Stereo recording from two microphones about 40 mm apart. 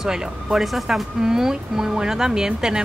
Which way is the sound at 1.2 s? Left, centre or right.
Centre.